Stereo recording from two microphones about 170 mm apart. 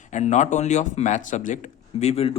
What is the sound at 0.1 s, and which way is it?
Speech, 45° left (ahead or behind).